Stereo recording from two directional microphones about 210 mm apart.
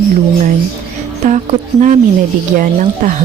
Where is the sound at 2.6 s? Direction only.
40° right (ahead or behind).